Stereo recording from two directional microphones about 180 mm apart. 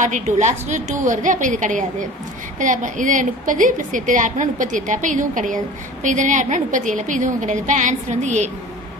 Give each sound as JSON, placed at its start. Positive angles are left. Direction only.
{"t": 0.0, "sound": "a woman's voice", "side_deg": -40}